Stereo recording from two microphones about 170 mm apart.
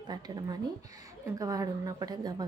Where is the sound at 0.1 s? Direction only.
25° right (ahead or behind).